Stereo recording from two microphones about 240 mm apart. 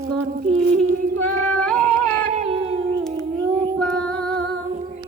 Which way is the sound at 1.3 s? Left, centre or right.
Centre.